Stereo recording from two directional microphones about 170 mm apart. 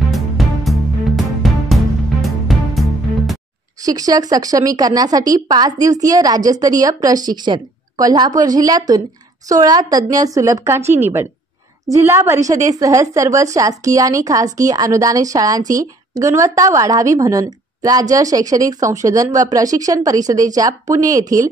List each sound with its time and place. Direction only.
0.1 s music: centre (ahead or behind)
3.8 s a woman's voice: 20° right (ahead or behind)